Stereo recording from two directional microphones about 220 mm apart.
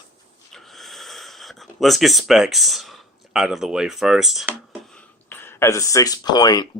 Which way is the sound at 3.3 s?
Centre (ahead or behind).